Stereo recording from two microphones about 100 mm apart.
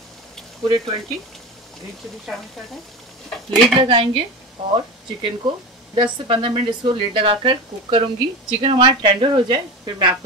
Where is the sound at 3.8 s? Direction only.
55° right (ahead or behind).